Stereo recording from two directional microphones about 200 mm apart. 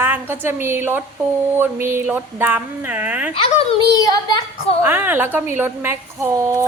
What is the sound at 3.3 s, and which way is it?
A woman's voice, 30° left (ahead or behind).